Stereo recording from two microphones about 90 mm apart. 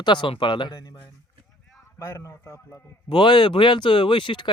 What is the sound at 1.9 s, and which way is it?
Speech, 30° left (ahead or behind).